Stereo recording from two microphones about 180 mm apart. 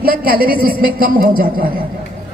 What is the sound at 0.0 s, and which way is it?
A woman's voice, 55° right (ahead or behind).